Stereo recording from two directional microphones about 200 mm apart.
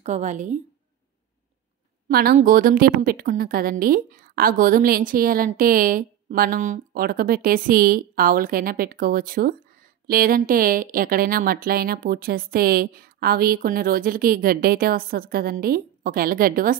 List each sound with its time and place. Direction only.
0.0 s a woman's voice: 35° right (ahead or behind)
2.0 s a woman's voice: 50° right (ahead or behind)